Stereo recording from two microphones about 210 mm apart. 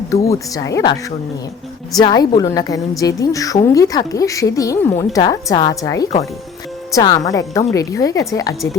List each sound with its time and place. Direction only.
0.1 s a woman's voice: 15° left (ahead or behind)
2.0 s a woman's voice: 20° left (ahead or behind)